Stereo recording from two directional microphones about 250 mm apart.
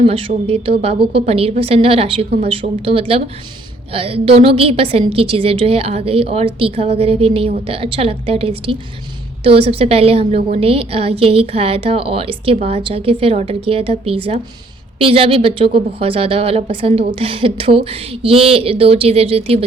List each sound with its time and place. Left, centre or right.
0.0 s a woman's voice: right